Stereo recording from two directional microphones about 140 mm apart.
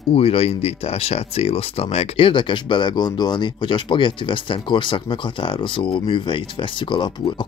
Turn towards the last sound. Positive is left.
turn(degrees=35)  # may be behind; listen again after turning